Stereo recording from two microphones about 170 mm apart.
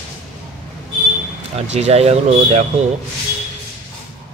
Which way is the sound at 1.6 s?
40° right (ahead or behind).